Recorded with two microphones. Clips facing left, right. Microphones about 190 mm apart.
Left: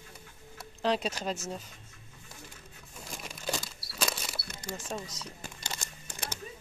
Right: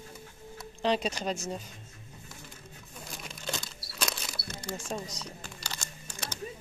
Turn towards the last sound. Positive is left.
turn(degrees=20)  # may be behind; listen again after turning